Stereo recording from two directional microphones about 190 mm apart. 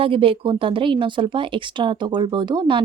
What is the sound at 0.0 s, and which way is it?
Speech, 30° right (ahead or behind).